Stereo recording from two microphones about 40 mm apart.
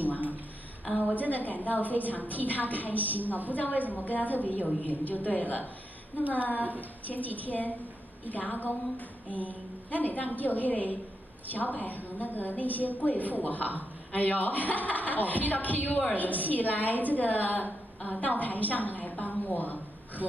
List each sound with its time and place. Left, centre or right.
0.9 s a woman's voice: left
7.1 s a woman's voice: left